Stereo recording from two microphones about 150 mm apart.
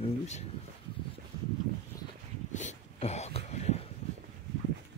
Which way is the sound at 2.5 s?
50° left (ahead or behind).